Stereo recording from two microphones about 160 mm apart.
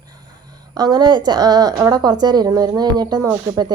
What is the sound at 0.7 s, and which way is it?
A woman's voice, 25° right (ahead or behind).